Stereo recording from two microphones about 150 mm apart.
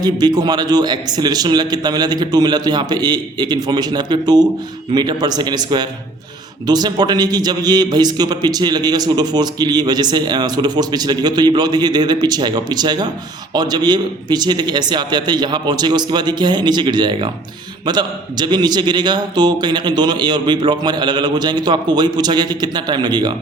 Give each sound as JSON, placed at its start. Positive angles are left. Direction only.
{"t": 0.0, "sound": "a man's voice", "side_deg": -25}